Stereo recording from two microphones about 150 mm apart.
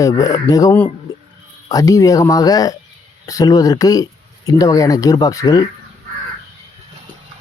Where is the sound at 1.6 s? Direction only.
25° left (ahead or behind).